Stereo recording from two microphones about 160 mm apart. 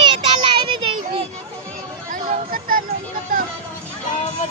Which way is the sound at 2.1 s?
60° right (ahead or behind).